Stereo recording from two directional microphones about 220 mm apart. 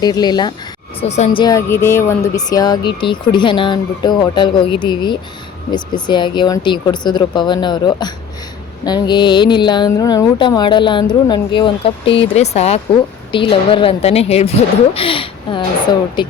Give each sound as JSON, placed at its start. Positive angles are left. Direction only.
{"t": 0.0, "sound": "speech", "side_deg": 20}
{"t": 0.9, "sound": "speech", "side_deg": 30}